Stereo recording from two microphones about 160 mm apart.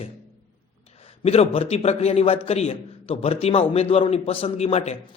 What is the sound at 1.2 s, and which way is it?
A man's voice, 40° left (ahead or behind).